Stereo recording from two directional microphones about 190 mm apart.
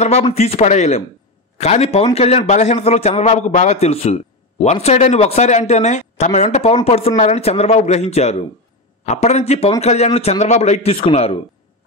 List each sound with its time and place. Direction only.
0.0 s a man's voice: 35° left (ahead or behind)